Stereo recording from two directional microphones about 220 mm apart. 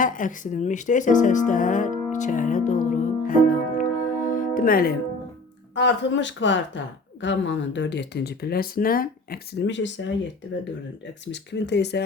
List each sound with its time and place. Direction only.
0.0 s speech: 35° left (ahead or behind)
2.1 s music: 35° left (ahead or behind)
5.7 s a woman's voice: 55° left (ahead or behind)